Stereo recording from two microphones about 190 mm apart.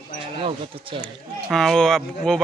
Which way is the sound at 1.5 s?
Centre (ahead or behind).